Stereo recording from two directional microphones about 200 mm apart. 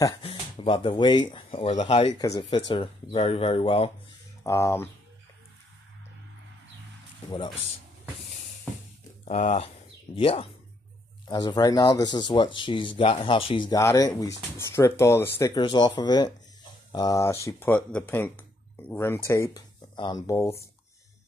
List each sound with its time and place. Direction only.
0.2 s speech: 30° left (ahead or behind)
4.4 s speech: 15° left (ahead or behind)
7.2 s speech: 25° left (ahead or behind)
9.2 s speech: 35° left (ahead or behind); by 20.5 s 15° left (ahead or behind)